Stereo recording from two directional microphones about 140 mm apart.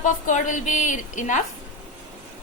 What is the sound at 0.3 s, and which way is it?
A woman's voice, 65° left (ahead or behind).